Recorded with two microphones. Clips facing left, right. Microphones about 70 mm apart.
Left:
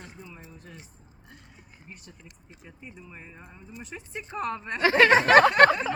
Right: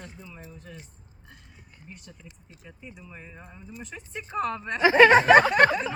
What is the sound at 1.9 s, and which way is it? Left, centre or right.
Speech, left.